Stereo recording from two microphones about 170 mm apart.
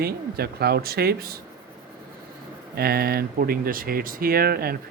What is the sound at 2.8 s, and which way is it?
Speech, 65° right (ahead or behind).